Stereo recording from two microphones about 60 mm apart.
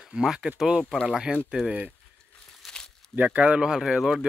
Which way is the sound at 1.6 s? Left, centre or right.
Centre.